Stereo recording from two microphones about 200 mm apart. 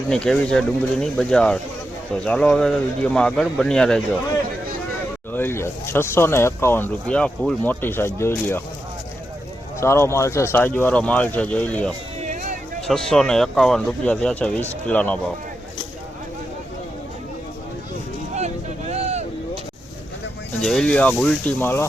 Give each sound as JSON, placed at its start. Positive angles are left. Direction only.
{"t": 0.1, "sound": "speech", "side_deg": 5}
{"t": 5.3, "sound": "speech", "side_deg": 10}
{"t": 9.8, "sound": "speech", "side_deg": 15}
{"t": 12.2, "sound": "vehicle", "side_deg": -40}
{"t": 12.9, "sound": "speech", "side_deg": 5}
{"t": 18.3, "sound": "vehicle", "side_deg": -35}
{"t": 20.6, "sound": "speech", "side_deg": 0}